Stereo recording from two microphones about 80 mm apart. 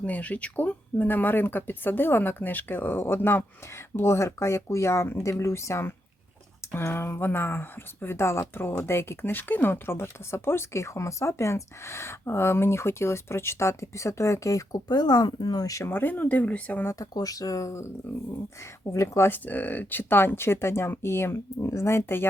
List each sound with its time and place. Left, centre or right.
0.0 s speech: centre; by 15.8 s left
15.8 s speech: left
17.0 s speech: left